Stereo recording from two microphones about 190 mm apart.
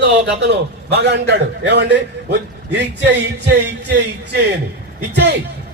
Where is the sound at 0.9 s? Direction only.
60° right (ahead or behind).